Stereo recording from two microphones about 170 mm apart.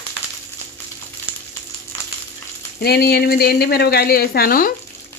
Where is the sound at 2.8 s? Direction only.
65° left (ahead or behind).